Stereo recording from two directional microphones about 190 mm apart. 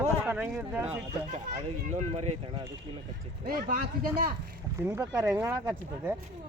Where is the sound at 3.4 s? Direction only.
50° right (ahead or behind).